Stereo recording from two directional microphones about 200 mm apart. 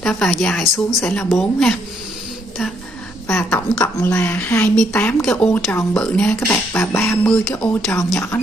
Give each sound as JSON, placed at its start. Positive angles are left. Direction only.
{"t": 0.0, "sound": "a woman's voice", "side_deg": 5}
{"t": 3.3, "sound": "a woman's voice", "side_deg": 5}